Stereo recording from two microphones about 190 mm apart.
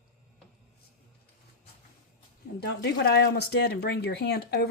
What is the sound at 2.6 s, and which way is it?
Speech, 65° left (ahead or behind).